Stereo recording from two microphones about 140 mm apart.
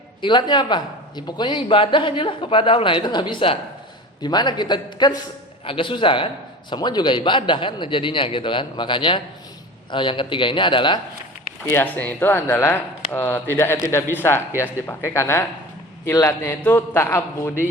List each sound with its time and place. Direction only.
0.2 s a man's voice: 35° left (ahead or behind)
11.7 s a man's voice: 15° left (ahead or behind)